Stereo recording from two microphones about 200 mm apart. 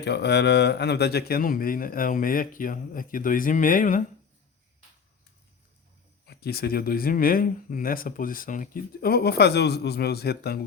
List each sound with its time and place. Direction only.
0.0 s speech: 55° left (ahead or behind); by 4.0 s 40° left (ahead or behind)
6.2 s speech: 50° left (ahead or behind)